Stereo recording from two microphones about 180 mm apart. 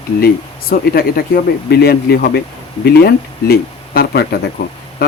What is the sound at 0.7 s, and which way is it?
Speech, 55° left (ahead or behind).